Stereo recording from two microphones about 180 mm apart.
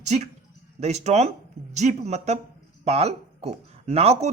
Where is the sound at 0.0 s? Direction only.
40° right (ahead or behind).